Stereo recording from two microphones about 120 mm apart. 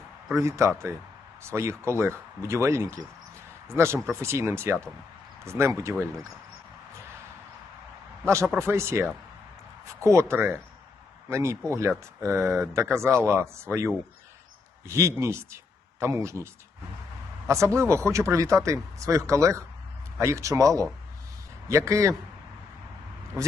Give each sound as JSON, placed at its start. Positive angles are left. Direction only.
{"t": 0.3, "sound": "speech", "side_deg": -25}
{"t": 8.2, "sound": "a man's voice", "side_deg": -20}
{"t": 17.5, "sound": "speech", "side_deg": -25}